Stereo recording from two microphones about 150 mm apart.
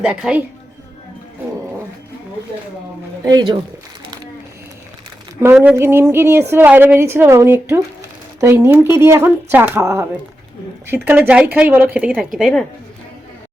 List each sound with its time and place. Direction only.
0.0 s speech: 5° right (ahead or behind)
3.2 s speech: 30° right (ahead or behind)
5.7 s speech: 15° right (ahead or behind); by 12.6 s centre (ahead or behind)